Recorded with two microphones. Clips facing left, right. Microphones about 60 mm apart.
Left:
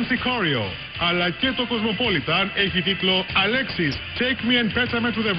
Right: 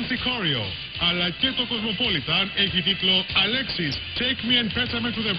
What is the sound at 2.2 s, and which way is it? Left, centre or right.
Speech, left.